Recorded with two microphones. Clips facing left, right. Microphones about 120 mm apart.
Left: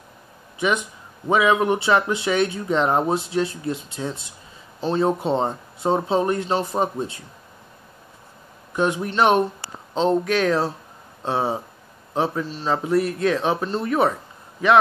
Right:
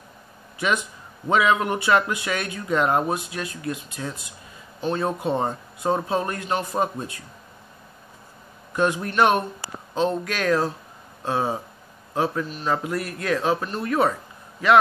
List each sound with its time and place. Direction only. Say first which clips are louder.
0.6 s speech: left 2 dB; 20° left (ahead or behind)
8.7 s speech: even; 20° left (ahead or behind)